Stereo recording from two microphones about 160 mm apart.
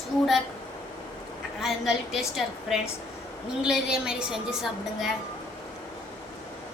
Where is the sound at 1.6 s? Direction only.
Centre (ahead or behind).